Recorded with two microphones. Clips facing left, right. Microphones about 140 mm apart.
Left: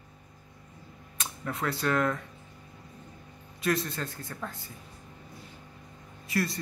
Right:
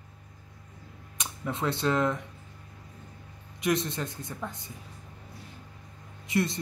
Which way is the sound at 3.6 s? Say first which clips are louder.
Right 1 dB; 20° right (ahead or behind).